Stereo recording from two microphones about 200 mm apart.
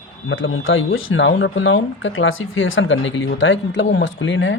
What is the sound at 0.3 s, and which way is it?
Speech, 80° left.